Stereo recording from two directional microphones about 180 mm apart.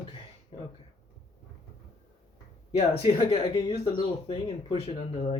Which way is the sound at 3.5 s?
25° left (ahead or behind).